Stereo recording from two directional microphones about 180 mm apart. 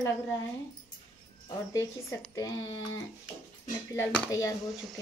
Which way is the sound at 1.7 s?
15° left (ahead or behind).